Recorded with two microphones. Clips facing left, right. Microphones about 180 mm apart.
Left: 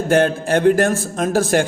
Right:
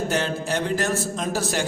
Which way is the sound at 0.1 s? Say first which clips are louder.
Left 9 dB; 55° left (ahead or behind).